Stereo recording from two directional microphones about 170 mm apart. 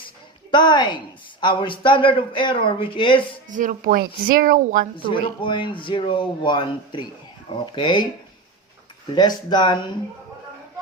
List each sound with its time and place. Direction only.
0.5 s a woman's voice: 25° left (ahead or behind)
3.5 s speech: 50° right (ahead or behind)
4.9 s a woman's voice: 30° left (ahead or behind)
9.1 s a woman's voice: 25° left (ahead or behind)